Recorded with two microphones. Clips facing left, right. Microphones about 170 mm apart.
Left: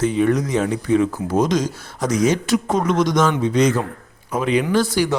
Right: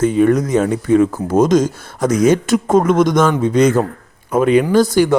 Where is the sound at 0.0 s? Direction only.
50° right (ahead or behind).